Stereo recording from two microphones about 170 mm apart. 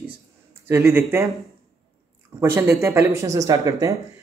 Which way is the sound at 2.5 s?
15° right (ahead or behind).